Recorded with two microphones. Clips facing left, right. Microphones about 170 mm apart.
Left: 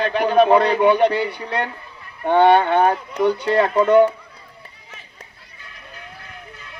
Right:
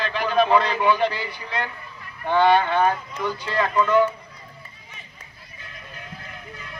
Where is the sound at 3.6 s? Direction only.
35° left (ahead or behind).